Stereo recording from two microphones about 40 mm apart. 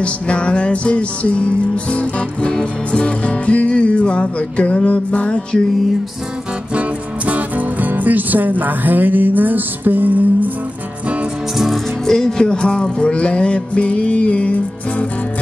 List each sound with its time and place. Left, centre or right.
0.0 s music: left
6.7 s speech: right
11.5 s music: centre
12.1 s music: centre; by 15.0 s left